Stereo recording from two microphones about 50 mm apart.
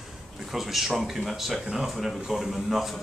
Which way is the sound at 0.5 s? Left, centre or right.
Centre.